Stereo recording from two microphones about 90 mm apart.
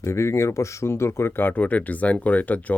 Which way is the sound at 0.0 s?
30° left (ahead or behind).